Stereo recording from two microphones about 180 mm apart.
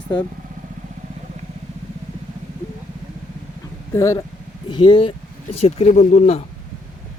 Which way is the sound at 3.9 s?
15° left (ahead or behind).